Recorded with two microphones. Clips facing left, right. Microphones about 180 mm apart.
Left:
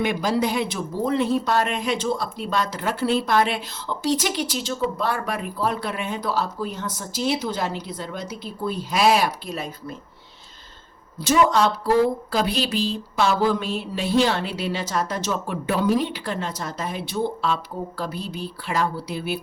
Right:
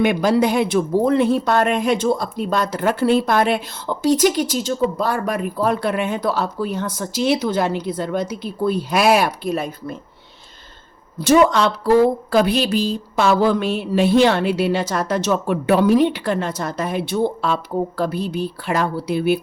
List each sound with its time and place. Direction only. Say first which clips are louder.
0.0 s speech: right 6 dB; 60° right (ahead or behind)
11.2 s speech: right 4 dB; 65° right (ahead or behind)